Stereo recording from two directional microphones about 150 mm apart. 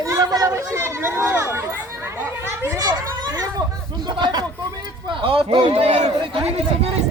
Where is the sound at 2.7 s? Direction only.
25° right (ahead or behind).